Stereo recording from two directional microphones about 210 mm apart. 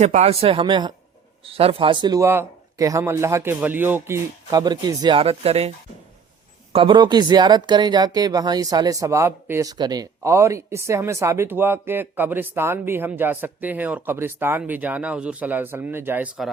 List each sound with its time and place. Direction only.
0.0 s speech: 30° right (ahead or behind)
6.7 s speech: 20° right (ahead or behind)